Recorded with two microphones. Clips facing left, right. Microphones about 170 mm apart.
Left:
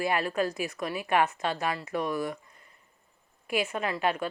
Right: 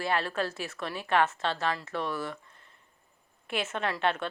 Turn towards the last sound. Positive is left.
turn(degrees=5)  # may be behind; listen again after turning